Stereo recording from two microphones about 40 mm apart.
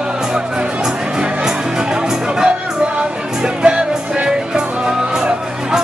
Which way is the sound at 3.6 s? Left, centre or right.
Right.